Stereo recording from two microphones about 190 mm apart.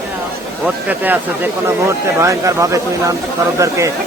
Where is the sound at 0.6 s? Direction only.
10° right (ahead or behind).